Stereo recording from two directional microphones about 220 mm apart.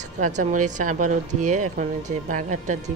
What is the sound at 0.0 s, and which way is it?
Speech, 35° right (ahead or behind).